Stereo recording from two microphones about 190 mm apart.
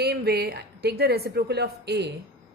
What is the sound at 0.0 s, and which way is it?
A woman's voice, 60° right (ahead or behind).